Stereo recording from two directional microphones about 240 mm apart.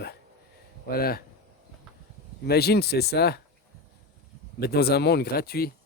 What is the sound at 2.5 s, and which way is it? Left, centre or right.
Speech, left.